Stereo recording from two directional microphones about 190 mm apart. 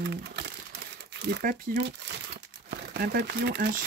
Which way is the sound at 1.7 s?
45° right (ahead or behind).